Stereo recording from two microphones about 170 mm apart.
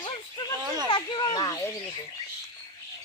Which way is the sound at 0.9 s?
30° left (ahead or behind).